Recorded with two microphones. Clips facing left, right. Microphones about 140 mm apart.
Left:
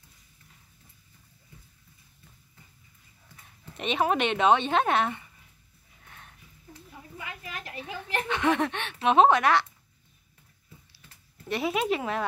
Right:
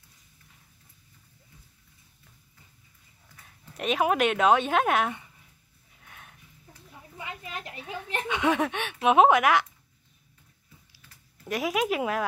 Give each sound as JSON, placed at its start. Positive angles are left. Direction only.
{"t": 3.7, "sound": "speech", "side_deg": -5}
{"t": 6.0, "sound": "a sound", "side_deg": -5}
{"t": 7.2, "sound": "a sound", "side_deg": -25}
{"t": 8.1, "sound": "speech", "side_deg": -20}
{"t": 8.5, "sound": "speech", "side_deg": -10}
{"t": 11.4, "sound": "speech", "side_deg": -5}